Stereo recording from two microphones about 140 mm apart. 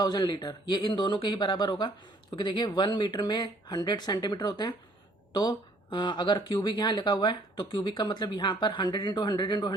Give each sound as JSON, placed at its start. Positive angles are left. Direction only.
{"t": 0.0, "sound": "speech", "side_deg": 30}